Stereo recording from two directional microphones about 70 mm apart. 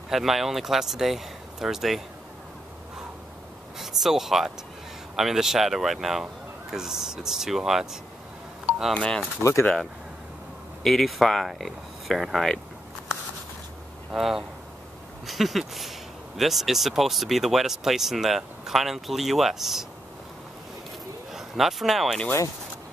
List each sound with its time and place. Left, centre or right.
0.1 s speech: centre
3.7 s speech: centre
8.9 s speech: centre
9.4 s speech: left
10.8 s speech: centre
14.1 s speech: centre
21.3 s speech: centre